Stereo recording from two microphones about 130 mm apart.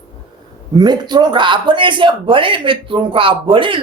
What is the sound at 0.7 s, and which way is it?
A man's voice, 35° right (ahead or behind).